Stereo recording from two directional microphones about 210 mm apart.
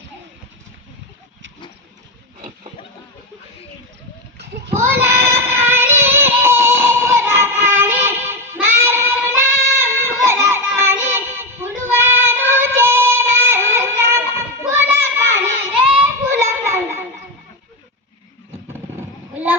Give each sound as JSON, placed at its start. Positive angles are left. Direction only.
{"t": 4.7, "sound": "child singing", "side_deg": -15}
{"t": 18.7, "sound": "vehicle", "side_deg": -10}